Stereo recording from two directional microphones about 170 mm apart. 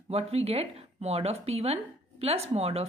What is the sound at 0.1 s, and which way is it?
Speech, 35° right (ahead or behind).